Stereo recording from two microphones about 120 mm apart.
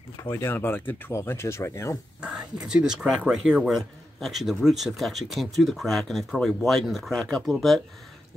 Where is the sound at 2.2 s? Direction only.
5° right (ahead or behind).